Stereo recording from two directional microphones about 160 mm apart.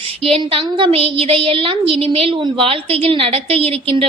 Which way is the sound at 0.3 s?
35° right (ahead or behind).